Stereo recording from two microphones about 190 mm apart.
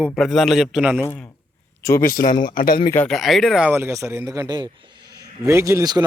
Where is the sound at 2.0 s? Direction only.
45° left (ahead or behind).